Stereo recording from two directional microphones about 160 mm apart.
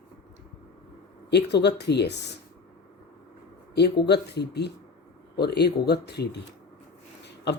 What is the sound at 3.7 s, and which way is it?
A man's voice, 90° left.